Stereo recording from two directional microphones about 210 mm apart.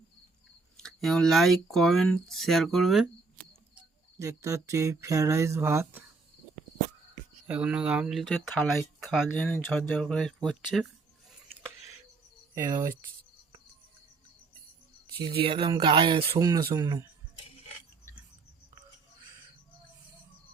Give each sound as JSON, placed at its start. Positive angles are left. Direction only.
{"t": 0.8, "sound": "speech", "side_deg": 0}
{"t": 3.8, "sound": "cricket", "side_deg": -15}
{"t": 7.4, "sound": "speech", "side_deg": -5}
{"t": 12.5, "sound": "speech", "side_deg": -15}
{"t": 15.4, "sound": "speech", "side_deg": -25}